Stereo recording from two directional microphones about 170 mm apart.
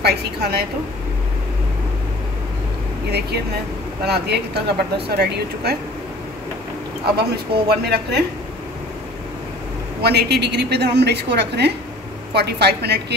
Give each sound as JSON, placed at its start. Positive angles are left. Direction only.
{"t": 0.0, "sound": "speech", "side_deg": -70}
{"t": 4.0, "sound": "speech", "side_deg": -75}
{"t": 7.2, "sound": "speech", "side_deg": -70}
{"t": 10.0, "sound": "a woman's voice", "side_deg": -75}